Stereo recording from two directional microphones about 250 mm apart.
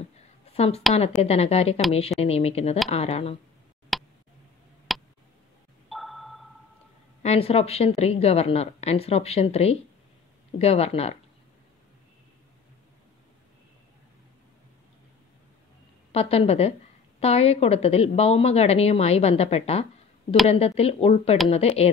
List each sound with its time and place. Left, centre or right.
0.5 s a woman's voice: left
3.9 s a sound: centre
5.9 s sonar: centre
7.2 s a woman's voice: left
16.1 s a woman's voice: left